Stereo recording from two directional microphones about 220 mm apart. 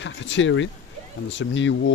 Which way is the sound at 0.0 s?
60° left (ahead or behind).